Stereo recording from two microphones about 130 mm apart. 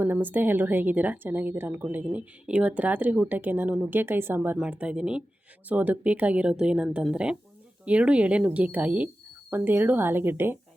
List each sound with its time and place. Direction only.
0.0 s a woman's voice: 15° right (ahead or behind)